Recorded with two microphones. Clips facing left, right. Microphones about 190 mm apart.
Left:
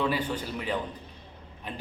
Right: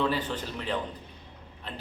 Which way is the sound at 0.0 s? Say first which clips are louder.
Even; 10° left (ahead or behind).